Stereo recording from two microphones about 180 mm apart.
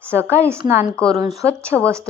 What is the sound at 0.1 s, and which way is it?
Speech, 15° right (ahead or behind).